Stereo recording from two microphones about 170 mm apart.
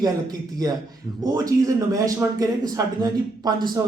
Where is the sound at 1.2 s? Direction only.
20° right (ahead or behind).